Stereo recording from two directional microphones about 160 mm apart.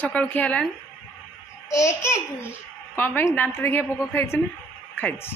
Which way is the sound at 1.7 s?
20° left (ahead or behind).